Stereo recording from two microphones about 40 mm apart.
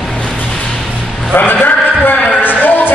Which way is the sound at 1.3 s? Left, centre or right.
Left.